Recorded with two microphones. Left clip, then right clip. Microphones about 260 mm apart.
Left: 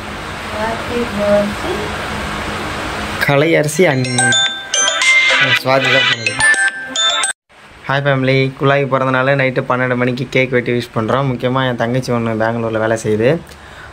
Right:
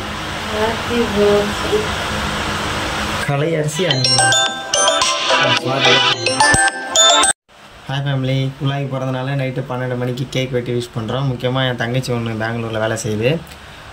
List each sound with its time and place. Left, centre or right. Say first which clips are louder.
3.3 s speech: left 11 dB; centre
3.9 s music: even; right
7.9 s speech: left 9 dB; centre